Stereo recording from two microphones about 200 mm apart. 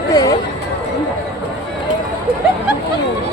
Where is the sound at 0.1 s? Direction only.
15° left (ahead or behind).